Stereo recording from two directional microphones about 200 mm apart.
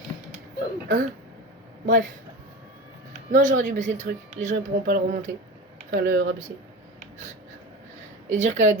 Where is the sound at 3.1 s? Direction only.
40° right (ahead or behind).